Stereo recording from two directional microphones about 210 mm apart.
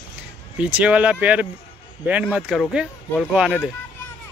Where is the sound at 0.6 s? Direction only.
5° right (ahead or behind).